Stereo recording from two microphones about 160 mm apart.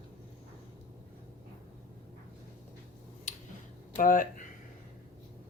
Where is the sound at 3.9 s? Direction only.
60° left (ahead or behind).